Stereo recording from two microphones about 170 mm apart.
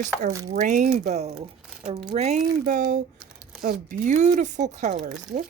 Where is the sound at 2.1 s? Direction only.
40° right (ahead or behind).